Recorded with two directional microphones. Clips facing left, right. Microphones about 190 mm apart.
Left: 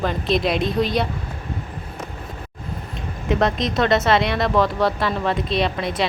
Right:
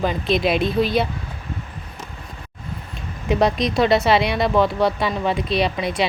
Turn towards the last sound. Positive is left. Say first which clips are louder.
# right 1 dB
turn(degrees=0)  # may be behind; listen again after turning